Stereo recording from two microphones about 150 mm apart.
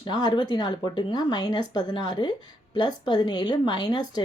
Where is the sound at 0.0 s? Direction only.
30° left (ahead or behind).